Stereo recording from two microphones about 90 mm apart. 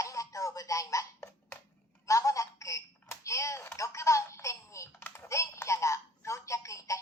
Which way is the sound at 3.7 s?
35° left (ahead or behind).